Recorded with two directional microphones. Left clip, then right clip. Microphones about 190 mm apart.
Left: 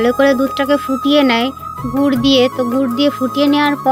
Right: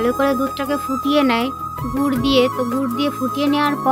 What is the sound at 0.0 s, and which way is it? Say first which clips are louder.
Speech: left 5 dB; 20° left (ahead or behind).